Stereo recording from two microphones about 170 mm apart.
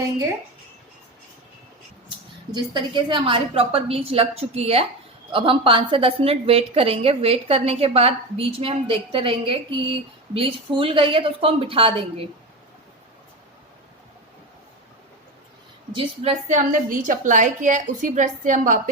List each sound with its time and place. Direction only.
2.5 s a woman's voice: 30° right (ahead or behind)
15.9 s a woman's voice: 30° right (ahead or behind)
16.5 s a woman's voice: 50° right (ahead or behind)